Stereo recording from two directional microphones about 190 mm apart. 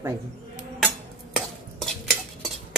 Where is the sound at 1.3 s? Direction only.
Centre (ahead or behind).